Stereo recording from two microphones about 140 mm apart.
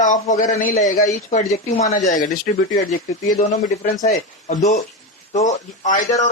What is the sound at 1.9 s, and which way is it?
Speech, 65° left (ahead or behind).